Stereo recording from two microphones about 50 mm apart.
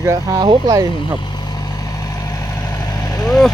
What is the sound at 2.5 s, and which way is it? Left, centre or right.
Vehicle, left.